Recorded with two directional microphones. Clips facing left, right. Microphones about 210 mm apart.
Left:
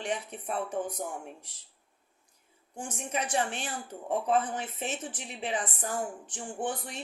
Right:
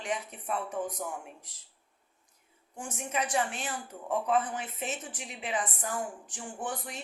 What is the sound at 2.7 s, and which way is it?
Speech, 30° left (ahead or behind).